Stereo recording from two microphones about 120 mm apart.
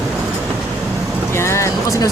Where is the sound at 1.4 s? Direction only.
25° left (ahead or behind).